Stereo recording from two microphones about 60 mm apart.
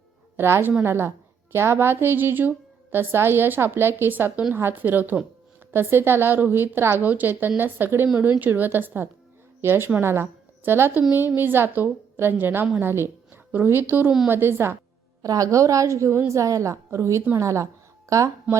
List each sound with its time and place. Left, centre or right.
0.3 s a woman's voice: right
15.2 s a woman's voice: right
18.5 s speech: right